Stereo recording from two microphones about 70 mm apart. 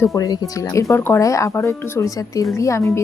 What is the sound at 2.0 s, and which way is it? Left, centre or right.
Speech, left.